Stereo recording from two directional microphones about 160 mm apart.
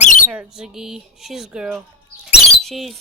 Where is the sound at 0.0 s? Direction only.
50° left (ahead or behind).